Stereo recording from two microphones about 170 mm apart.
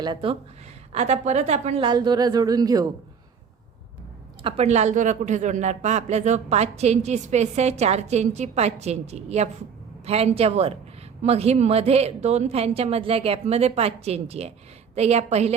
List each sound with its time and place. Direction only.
0.0 s a woman's voice: 30° right (ahead or behind)
0.9 s speech: 40° right (ahead or behind)
1.9 s a woman's voice: 25° right (ahead or behind)
4.4 s speech: 40° right (ahead or behind)